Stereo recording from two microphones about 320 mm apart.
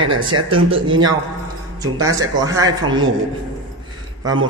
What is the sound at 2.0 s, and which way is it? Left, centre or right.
Speech, centre.